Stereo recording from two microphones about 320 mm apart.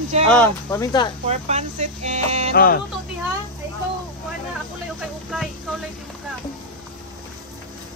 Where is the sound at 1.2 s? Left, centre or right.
Centre.